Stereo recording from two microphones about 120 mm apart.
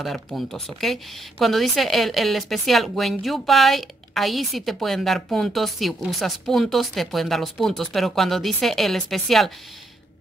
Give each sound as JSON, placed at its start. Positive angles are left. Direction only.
{"t": 0.0, "sound": "a woman's voice", "side_deg": 0}